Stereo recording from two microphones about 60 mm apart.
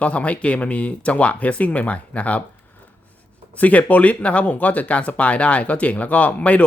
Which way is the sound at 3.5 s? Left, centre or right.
Left.